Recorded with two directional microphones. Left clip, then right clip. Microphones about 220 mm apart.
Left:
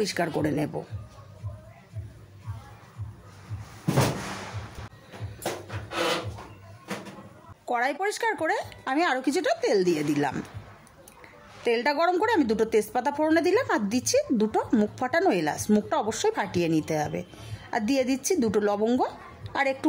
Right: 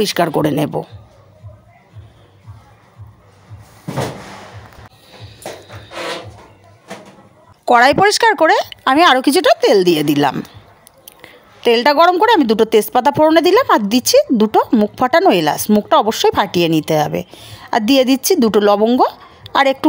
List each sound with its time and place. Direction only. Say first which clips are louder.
0.0 s a woman's voice: right 12 dB; 35° right (ahead or behind)
7.6 s a woman's voice: right 17 dB; 45° right (ahead or behind)